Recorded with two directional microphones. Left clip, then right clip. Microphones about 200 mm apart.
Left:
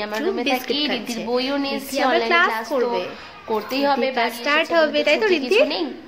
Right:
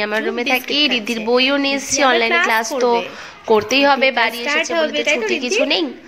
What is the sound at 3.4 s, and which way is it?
Speech, 25° right (ahead or behind).